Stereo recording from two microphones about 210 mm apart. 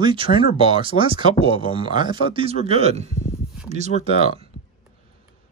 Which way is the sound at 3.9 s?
35° left (ahead or behind).